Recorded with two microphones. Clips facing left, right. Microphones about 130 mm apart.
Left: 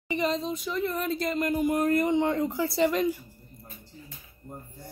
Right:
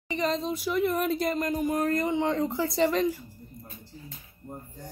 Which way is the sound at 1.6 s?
15° left (ahead or behind).